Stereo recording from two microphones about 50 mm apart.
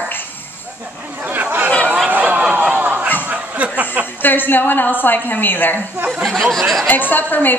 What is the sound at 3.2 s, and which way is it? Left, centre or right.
Snicker, right.